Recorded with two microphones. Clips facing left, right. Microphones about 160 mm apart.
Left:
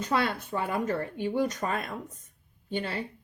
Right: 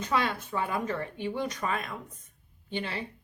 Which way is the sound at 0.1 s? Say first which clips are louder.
Left 1 dB; 45° left (ahead or behind).